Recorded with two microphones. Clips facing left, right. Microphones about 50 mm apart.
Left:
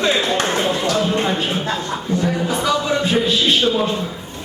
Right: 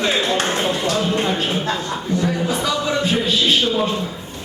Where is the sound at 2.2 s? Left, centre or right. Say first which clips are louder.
Left 1 dB; left.